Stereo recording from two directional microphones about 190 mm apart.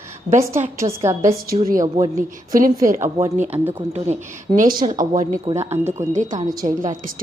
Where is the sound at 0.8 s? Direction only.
15° right (ahead or behind).